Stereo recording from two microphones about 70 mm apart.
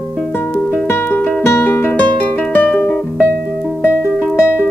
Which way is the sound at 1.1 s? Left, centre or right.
Left.